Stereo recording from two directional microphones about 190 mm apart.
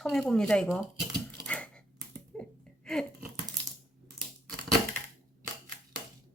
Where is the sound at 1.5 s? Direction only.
5° left (ahead or behind).